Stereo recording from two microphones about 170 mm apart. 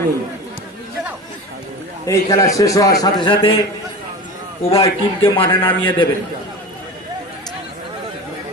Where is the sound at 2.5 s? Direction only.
20° left (ahead or behind).